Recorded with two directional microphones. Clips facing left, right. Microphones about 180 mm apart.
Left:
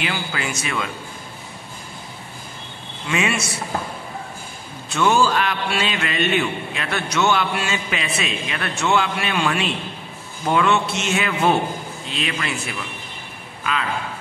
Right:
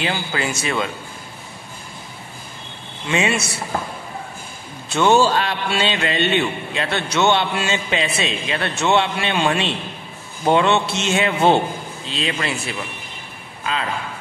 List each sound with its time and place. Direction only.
0.0 s speech: 30° right (ahead or behind)
3.1 s a man's voice: 25° right (ahead or behind)
4.9 s a man's voice: 30° right (ahead or behind)